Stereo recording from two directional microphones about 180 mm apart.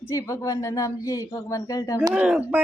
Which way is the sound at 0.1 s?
15° left (ahead or behind).